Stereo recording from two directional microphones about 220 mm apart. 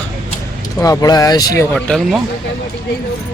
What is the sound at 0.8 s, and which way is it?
Speech, 15° left (ahead or behind).